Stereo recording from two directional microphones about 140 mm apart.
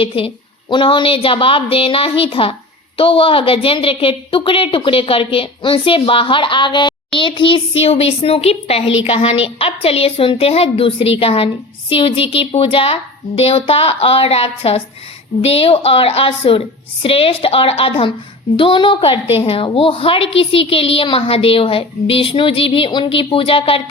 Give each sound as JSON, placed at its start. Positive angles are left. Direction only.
{"t": 0.0, "sound": "a woman's voice", "side_deg": 40}